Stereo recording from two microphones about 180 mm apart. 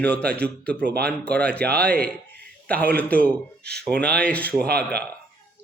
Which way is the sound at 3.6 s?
65° right (ahead or behind).